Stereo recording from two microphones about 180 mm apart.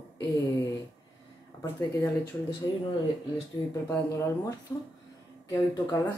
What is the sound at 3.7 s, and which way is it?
Speech, 15° left (ahead or behind).